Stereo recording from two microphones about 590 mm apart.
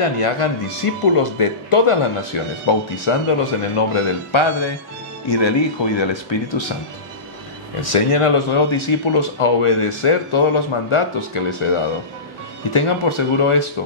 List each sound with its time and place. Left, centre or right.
0.0 s speech: left
7.9 s speech: left
12.7 s speech: left